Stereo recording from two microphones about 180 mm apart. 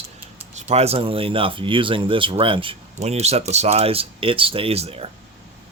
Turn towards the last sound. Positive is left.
turn(degrees=-35)  # may be behind; listen again after turning